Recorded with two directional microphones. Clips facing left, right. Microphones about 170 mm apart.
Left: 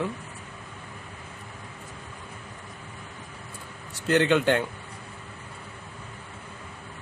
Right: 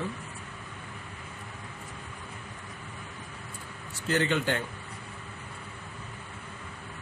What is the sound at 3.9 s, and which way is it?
Speech, 70° left (ahead or behind).